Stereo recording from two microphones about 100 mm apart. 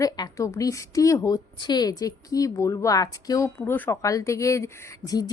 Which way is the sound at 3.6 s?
20° left (ahead or behind).